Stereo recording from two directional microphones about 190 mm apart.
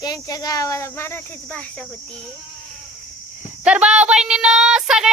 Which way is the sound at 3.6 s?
5° right (ahead or behind).